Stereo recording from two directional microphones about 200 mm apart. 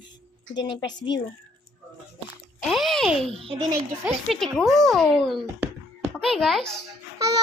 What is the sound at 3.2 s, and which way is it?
Speech, 30° right (ahead or behind).